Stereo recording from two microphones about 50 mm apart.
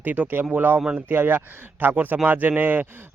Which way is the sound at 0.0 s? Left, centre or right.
Right.